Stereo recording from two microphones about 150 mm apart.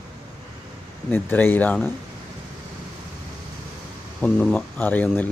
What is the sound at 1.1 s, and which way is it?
Speech, 15° left (ahead or behind).